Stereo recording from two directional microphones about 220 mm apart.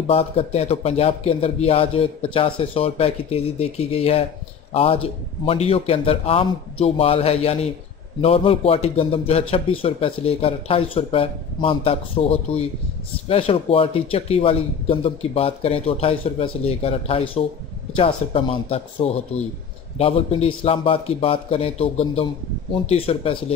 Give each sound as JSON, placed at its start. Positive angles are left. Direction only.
{"t": 0.1, "sound": "speech", "side_deg": 25}